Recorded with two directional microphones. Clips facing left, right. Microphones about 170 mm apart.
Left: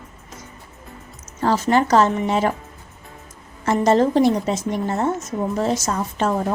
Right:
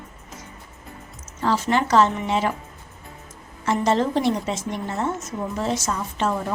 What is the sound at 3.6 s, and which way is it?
A woman's voice, 45° left (ahead or behind).